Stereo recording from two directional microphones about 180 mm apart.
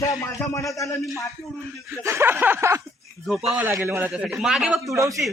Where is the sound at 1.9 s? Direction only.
15° right (ahead or behind).